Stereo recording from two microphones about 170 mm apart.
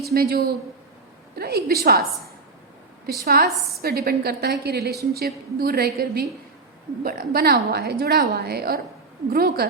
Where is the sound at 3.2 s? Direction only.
65° right (ahead or behind).